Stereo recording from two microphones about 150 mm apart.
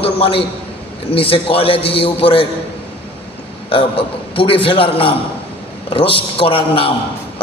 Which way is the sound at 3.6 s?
35° left (ahead or behind).